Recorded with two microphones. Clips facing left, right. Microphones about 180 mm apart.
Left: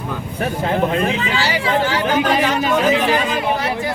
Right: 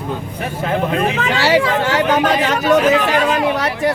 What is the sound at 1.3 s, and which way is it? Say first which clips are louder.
Speech: right 4 dB; 75° right (ahead or behind).